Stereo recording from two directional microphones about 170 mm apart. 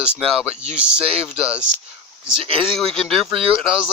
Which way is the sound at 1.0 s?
35° right (ahead or behind).